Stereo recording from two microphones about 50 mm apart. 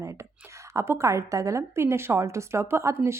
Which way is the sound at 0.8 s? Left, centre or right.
Right.